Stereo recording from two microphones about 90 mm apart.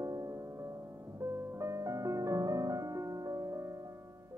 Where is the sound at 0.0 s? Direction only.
40° right (ahead or behind).